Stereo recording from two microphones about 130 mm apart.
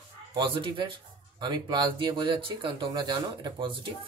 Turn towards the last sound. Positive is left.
turn(degrees=-40)  # may be behind; listen again after turning